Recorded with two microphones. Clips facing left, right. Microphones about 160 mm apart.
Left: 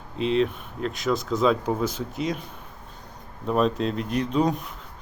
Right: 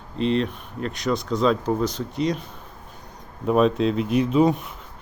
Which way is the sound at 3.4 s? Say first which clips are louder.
Right 4 dB; 5° right (ahead or behind).